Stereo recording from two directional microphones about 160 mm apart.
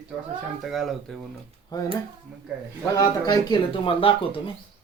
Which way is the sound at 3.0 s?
25° left (ahead or behind).